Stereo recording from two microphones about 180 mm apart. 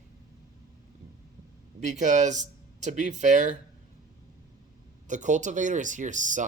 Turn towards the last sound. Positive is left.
turn(degrees=-45)  # may be behind; listen again after turning